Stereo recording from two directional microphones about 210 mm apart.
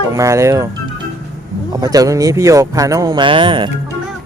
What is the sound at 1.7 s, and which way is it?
Speech, 15° right (ahead or behind).